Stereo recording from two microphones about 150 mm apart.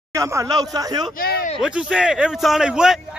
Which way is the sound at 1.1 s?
75° left (ahead or behind).